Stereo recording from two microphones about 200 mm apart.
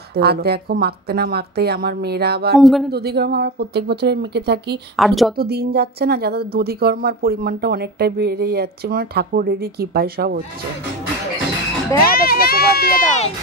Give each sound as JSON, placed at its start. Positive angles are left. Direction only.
{"t": 0.1, "sound": "a woman's voice", "side_deg": -50}
{"t": 2.6, "sound": "a woman's voice", "side_deg": 0}
{"t": 2.9, "sound": "speech", "side_deg": -55}
{"t": 4.9, "sound": "a woman's voice", "side_deg": 0}
{"t": 5.4, "sound": "a woman's voice", "side_deg": -50}
{"t": 12.1, "sound": "children playing", "side_deg": 50}